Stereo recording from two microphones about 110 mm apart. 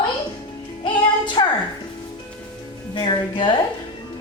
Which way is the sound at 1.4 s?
45° left (ahead or behind).